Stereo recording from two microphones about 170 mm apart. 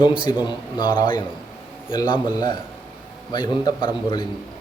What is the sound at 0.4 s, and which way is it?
Mantra, 30° left (ahead or behind).